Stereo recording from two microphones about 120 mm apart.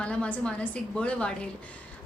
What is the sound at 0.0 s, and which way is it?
A woman's voice, 10° left (ahead or behind).